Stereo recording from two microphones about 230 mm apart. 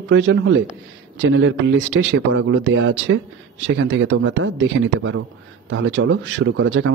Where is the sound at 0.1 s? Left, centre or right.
Right.